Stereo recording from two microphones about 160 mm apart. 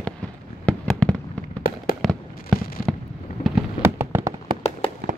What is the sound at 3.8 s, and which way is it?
Fireworks, 15° right (ahead or behind).